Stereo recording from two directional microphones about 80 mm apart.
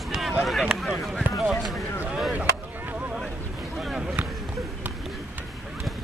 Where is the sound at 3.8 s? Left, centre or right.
Centre.